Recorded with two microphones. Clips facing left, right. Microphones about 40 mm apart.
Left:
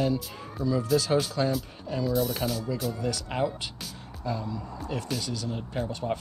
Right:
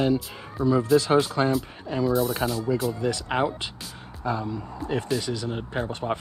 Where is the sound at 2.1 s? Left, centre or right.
Centre.